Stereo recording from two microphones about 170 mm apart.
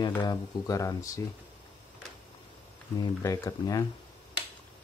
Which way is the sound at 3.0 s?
20° left (ahead or behind).